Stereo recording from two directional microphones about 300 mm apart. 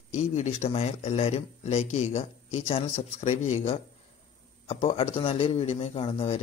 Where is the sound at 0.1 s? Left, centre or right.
Left.